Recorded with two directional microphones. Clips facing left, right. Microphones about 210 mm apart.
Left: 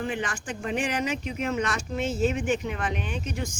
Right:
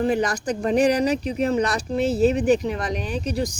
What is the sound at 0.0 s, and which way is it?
Speech, 40° right (ahead or behind).